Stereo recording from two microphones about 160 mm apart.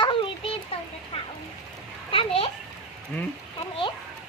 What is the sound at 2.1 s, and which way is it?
Speech, 35° left (ahead or behind).